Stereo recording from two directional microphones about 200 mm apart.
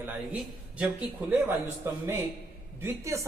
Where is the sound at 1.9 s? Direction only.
15° right (ahead or behind).